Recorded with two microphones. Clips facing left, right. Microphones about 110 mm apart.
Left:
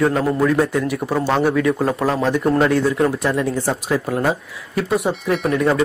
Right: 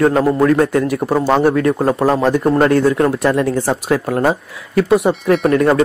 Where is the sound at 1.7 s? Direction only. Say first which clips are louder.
Right 4 dB; 30° right (ahead or behind).